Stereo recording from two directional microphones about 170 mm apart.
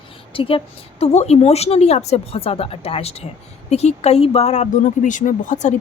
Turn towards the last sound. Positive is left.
turn(degrees=45)  # may be behind; listen again after turning